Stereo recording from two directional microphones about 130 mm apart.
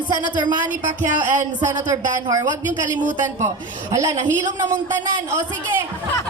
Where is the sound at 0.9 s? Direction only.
65° right (ahead or behind).